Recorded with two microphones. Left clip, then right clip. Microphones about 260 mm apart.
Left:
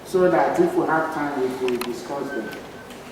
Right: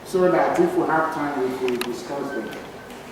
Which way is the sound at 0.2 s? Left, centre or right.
Centre.